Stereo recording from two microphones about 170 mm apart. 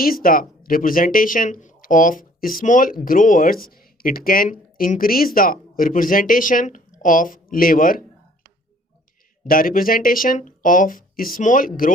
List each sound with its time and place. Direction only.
0.0 s speech: 60° left (ahead or behind)
9.5 s speech: 60° left (ahead or behind)